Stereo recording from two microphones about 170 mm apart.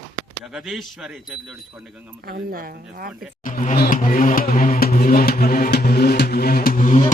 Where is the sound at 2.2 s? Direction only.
60° right (ahead or behind).